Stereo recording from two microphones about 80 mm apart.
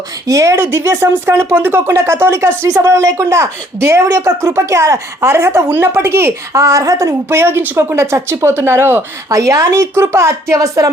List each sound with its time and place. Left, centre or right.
0.3 s speech: right
0.5 s speech: right
6.6 s speech: right
9.3 s speech: right